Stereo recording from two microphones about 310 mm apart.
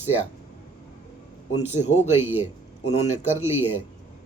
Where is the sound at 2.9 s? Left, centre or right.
Left.